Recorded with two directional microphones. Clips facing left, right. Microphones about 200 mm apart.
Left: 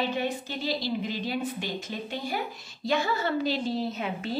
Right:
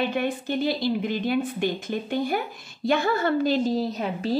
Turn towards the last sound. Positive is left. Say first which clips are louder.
# right 5 dB
turn(degrees=-35)  # may be behind; listen again after turning